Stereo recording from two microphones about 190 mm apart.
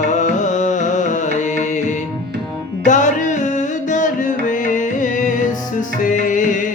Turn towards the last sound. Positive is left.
turn(degrees=40)  # may be behind; listen again after turning